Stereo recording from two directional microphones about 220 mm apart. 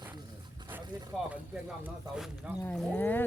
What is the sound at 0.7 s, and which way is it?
Music, 10° right (ahead or behind).